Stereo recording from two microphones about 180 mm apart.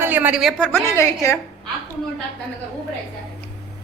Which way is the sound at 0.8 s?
15° left (ahead or behind).